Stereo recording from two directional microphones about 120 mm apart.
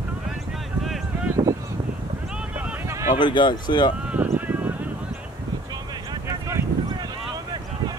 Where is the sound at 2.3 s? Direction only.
10° right (ahead or behind).